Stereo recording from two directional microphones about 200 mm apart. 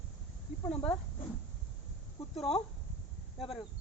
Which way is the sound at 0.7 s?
5° left (ahead or behind).